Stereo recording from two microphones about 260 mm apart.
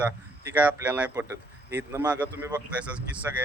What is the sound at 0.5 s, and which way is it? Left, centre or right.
A man's voice, centre.